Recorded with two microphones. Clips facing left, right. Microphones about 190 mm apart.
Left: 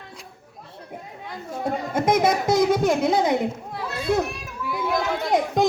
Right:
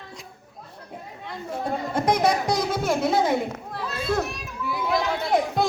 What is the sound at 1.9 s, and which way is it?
Speech, 5° left (ahead or behind).